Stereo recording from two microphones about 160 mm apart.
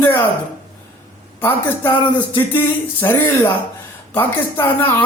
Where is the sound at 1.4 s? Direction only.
10° left (ahead or behind).